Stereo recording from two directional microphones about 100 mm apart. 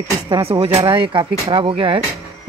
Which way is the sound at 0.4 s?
70° right (ahead or behind).